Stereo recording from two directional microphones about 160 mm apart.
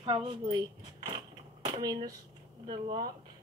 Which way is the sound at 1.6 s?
25° right (ahead or behind).